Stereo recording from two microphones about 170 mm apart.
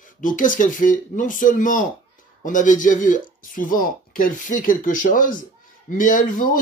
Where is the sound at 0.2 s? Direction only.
50° left (ahead or behind).